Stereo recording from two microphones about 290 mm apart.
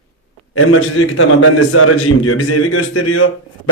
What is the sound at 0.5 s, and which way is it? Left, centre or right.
Speech, left.